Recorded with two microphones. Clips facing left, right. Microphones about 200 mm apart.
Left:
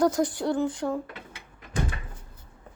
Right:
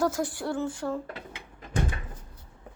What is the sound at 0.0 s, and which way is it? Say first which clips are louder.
Speech: left 4 dB; 20° left (ahead or behind).